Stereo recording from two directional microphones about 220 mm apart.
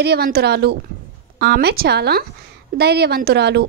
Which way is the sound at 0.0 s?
45° right (ahead or behind).